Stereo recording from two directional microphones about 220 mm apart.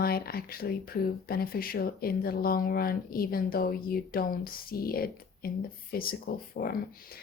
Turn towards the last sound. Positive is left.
turn(degrees=45)  # may be behind; listen again after turning